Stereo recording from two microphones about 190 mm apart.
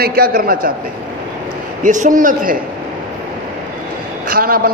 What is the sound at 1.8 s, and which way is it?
Speech, 40° right (ahead or behind).